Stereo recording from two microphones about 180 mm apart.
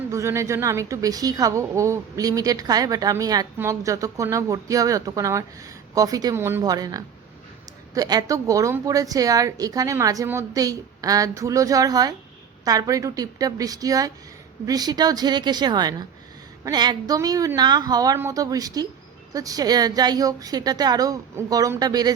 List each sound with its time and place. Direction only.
0.1 s a woman's voice: 15° right (ahead or behind)